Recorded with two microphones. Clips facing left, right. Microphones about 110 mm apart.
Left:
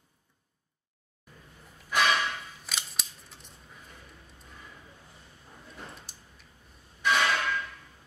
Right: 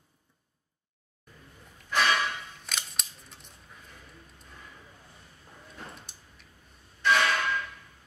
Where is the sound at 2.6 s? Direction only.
Centre (ahead or behind).